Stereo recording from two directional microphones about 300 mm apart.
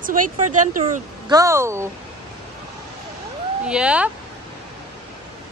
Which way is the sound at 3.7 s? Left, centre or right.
Centre.